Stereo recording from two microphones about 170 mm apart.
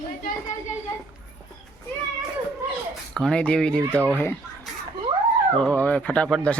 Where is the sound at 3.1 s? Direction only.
5° left (ahead or behind).